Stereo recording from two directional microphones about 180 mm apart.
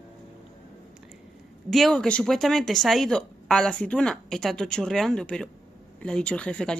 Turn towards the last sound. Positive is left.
turn(degrees=5)  # may be behind; listen again after turning